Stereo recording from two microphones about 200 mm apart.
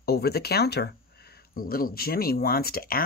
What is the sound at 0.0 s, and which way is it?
Speech, 50° left (ahead or behind).